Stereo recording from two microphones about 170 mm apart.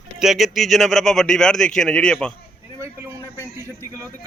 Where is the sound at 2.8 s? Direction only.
15° right (ahead or behind).